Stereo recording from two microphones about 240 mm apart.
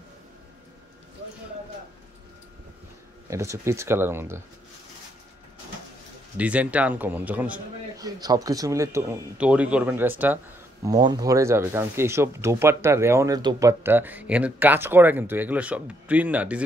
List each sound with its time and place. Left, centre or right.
3.3 s speech: centre
6.3 s a man's voice: centre